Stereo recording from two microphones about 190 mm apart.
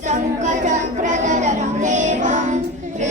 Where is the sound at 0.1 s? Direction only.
40° right (ahead or behind).